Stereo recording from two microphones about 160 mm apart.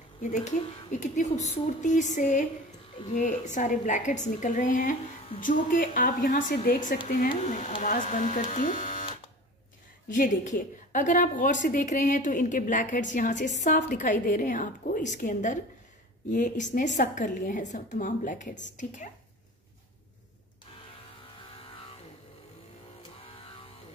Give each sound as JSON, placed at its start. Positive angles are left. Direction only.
{"t": 0.2, "sound": "a woman's voice", "side_deg": 50}
{"t": 10.0, "sound": "a woman's voice", "side_deg": 55}